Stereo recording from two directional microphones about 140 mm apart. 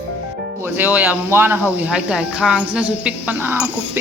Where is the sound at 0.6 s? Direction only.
15° right (ahead or behind).